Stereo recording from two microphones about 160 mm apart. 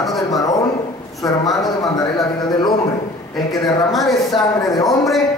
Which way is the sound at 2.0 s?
25° left (ahead or behind).